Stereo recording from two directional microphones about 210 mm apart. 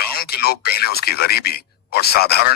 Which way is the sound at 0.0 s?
45° left (ahead or behind).